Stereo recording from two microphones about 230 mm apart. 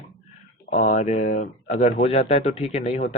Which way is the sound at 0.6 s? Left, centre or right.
Left.